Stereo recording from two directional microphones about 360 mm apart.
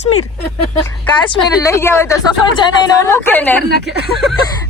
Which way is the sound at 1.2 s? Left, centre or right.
Centre.